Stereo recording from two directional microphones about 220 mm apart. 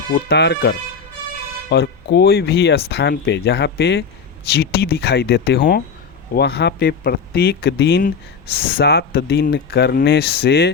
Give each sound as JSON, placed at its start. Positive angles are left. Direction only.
{"t": 0.3, "sound": "speech", "side_deg": 50}
{"t": 1.7, "sound": "speech", "side_deg": 45}